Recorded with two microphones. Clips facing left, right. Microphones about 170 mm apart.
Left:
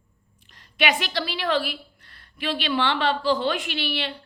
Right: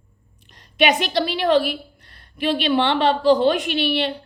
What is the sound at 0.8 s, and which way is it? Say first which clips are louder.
Speech: right 6 dB; 20° right (ahead or behind).